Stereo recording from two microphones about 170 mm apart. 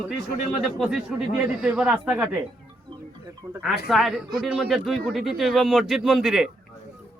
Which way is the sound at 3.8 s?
Centre (ahead or behind).